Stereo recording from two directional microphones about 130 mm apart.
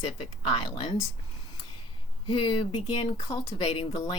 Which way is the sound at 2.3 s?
40° left (ahead or behind).